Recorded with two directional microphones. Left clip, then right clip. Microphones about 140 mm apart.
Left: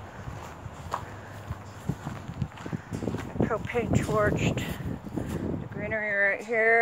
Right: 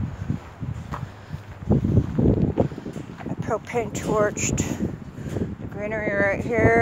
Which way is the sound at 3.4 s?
30° right (ahead or behind).